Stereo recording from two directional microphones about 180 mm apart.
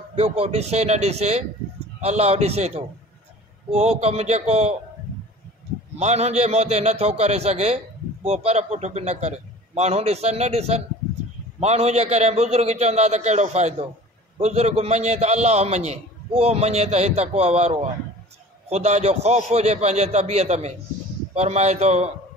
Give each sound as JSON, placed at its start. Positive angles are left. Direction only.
{"t": 0.1, "sound": "a man's voice", "side_deg": -35}
{"t": 5.9, "sound": "a man's voice", "side_deg": -40}